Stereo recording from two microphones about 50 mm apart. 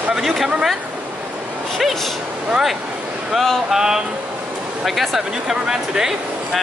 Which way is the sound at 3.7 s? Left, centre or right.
Centre.